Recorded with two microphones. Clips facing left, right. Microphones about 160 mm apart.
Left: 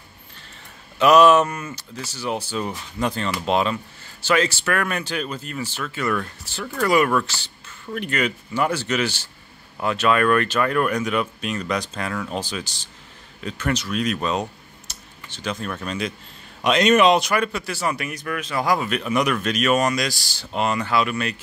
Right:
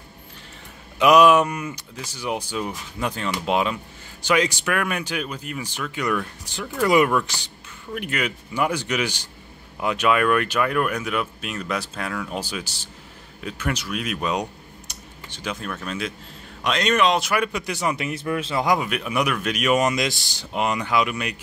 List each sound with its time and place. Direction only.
0.9 s speech: 15° right (ahead or behind)